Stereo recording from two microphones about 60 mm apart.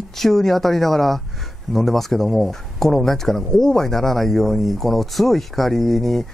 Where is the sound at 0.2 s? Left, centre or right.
Centre.